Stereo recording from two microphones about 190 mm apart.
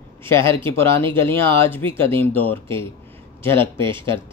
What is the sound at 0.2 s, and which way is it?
Speech, 15° left (ahead or behind).